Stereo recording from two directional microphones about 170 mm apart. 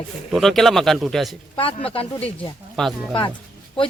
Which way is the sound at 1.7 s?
35° left (ahead or behind).